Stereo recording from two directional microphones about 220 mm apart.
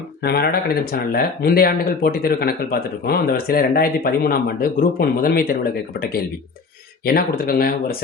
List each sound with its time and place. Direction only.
0.2 s speech: 45° left (ahead or behind)